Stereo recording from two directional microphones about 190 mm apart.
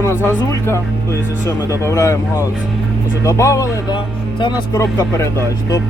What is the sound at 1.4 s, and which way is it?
Speech, 15° left (ahead or behind).